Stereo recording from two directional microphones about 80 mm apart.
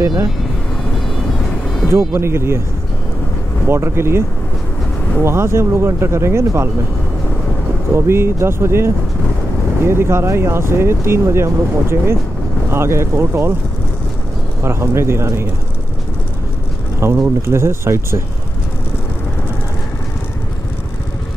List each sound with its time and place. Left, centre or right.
1.9 s speech: right
3.6 s speech: right
5.2 s speech: right
7.9 s speech: right
14.6 s speech: right
17.0 s speech: right